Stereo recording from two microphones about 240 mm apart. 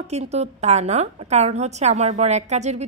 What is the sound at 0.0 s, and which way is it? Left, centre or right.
A woman's voice, right.